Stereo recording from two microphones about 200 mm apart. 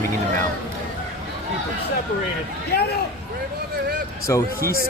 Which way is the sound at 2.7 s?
50° left (ahead or behind).